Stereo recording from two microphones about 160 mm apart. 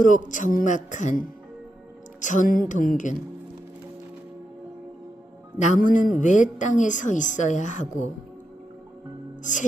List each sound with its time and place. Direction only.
0.0 s a woman's voice: 50° left (ahead or behind)
5.5 s a woman's voice: 50° left (ahead or behind)
9.4 s music: 50° left (ahead or behind)